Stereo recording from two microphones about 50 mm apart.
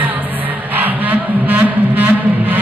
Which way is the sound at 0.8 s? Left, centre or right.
Right.